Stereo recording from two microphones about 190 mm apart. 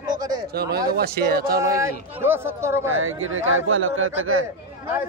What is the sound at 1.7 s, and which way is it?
Speech, 15° right (ahead or behind).